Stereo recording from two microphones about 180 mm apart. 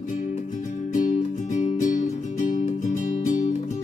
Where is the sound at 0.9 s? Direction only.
45° left (ahead or behind).